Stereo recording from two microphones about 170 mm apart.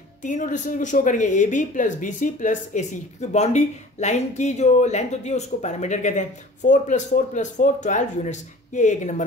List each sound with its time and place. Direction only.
0.2 s speech: 50° left (ahead or behind)